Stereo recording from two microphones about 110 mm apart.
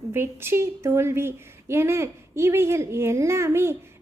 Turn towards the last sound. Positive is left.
turn(degrees=-25)  # may be behind; listen again after turning